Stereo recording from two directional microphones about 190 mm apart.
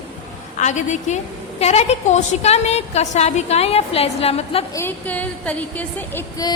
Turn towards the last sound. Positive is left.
turn(degrees=15)  # may be behind; listen again after turning